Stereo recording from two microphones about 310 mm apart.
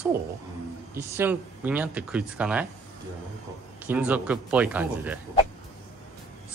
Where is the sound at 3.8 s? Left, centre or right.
Centre.